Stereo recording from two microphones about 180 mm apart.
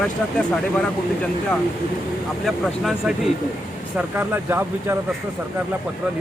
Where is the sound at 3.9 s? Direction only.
10° right (ahead or behind).